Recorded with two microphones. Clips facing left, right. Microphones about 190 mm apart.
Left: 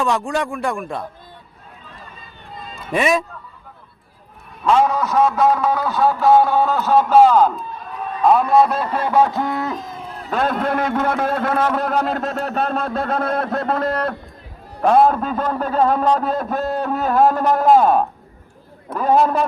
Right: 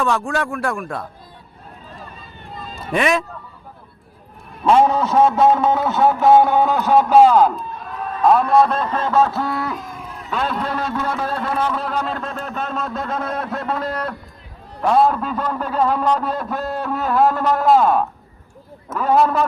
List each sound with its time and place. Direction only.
0.0 s speech: centre (ahead or behind)
2.5 s run: centre (ahead or behind)
4.6 s a man's voice: 25° right (ahead or behind); by 11.8 s 65° left (ahead or behind)
11.8 s a man's voice: 45° left (ahead or behind)
12.5 s a man's voice: 65° left (ahead or behind)
14.8 s a man's voice: 45° left (ahead or behind)
17.2 s a man's voice: 20° left (ahead or behind)
17.5 s speech: 40° left (ahead or behind)